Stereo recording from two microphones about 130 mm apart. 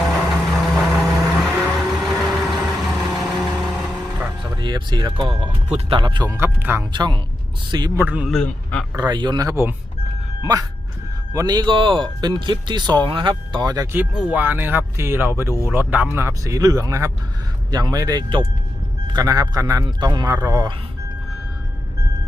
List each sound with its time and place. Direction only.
0.0 s vehicle: centre (ahead or behind)
1.5 s vehicle: 10° right (ahead or behind)
1.7 s vehicle: centre (ahead or behind)
4.5 s a sound: 35° right (ahead or behind)
5.9 s speech: 40° right (ahead or behind)
6.3 s speech: 15° right (ahead or behind)
6.9 s speech: 35° right (ahead or behind)
7.9 s speech: 10° right (ahead or behind)
8.3 s a man's voice: 5° left (ahead or behind)
9.0 s speech: 35° right (ahead or behind)
11.3 s speech: 30° right (ahead or behind)
13.9 s speech: 10° right (ahead or behind); by 20.7 s 30° right (ahead or behind)